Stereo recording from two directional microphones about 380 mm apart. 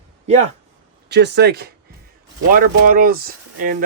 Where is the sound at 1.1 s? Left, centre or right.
Right.